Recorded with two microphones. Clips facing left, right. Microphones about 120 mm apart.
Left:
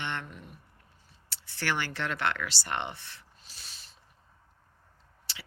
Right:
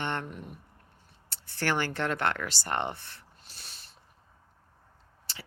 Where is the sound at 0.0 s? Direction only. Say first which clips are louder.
Right 3 dB; 45° right (ahead or behind).